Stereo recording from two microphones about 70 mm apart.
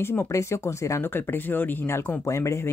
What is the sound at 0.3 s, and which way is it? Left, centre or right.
Speech, left.